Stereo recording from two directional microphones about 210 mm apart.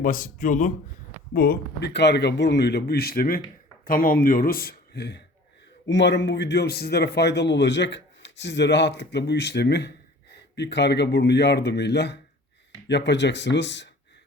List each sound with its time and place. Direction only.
0.0 s a man's voice: 40° left (ahead or behind); by 13.9 s 55° left (ahead or behind)